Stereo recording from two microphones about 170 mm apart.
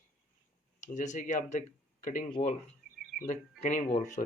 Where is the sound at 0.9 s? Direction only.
45° left (ahead or behind).